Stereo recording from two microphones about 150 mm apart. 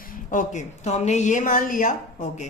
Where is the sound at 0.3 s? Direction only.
55° left (ahead or behind).